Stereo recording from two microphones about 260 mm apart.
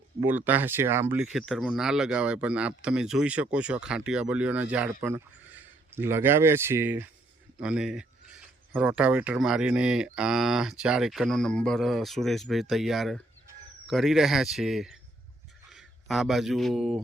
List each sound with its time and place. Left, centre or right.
0.2 s speech: centre
16.0 s speech: centre